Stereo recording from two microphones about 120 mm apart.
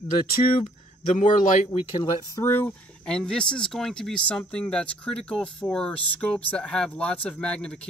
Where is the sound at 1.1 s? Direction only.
85° left.